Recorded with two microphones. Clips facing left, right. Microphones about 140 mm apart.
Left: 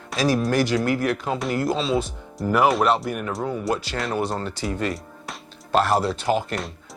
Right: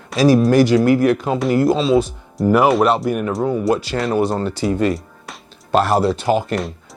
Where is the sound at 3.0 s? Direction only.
15° right (ahead or behind).